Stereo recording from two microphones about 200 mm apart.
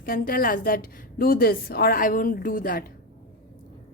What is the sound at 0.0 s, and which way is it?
A woman's voice, 45° left (ahead or behind).